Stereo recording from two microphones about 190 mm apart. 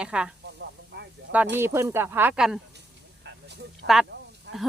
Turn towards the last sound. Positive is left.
turn(degrees=-65)  # may be behind; listen again after turning